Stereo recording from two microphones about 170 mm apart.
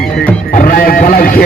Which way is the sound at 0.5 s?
55° left (ahead or behind).